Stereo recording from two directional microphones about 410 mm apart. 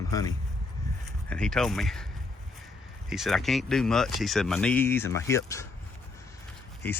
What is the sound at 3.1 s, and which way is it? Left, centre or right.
Speech, centre.